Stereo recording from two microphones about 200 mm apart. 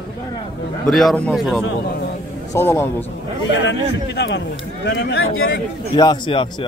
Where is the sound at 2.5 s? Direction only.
10° left (ahead or behind).